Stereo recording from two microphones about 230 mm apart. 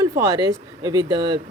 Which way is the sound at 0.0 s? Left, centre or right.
Centre.